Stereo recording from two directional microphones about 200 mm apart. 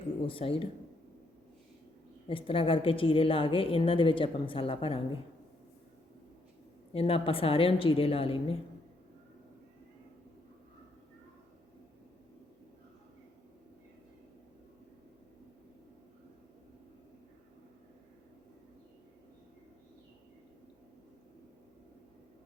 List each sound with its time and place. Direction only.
0.3 s a woman's voice: 25° left (ahead or behind)
2.2 s a woman's voice: 25° left (ahead or behind)
6.9 s a woman's voice: 30° left (ahead or behind)